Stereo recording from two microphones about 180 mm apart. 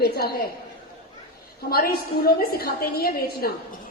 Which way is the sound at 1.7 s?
55° left (ahead or behind).